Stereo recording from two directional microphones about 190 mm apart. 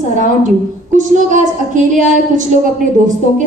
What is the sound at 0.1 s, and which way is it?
A woman's voice, 40° right (ahead or behind).